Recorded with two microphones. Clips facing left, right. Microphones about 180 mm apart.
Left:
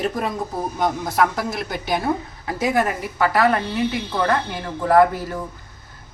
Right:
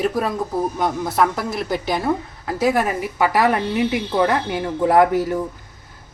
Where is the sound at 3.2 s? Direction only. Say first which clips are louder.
Even; 15° right (ahead or behind).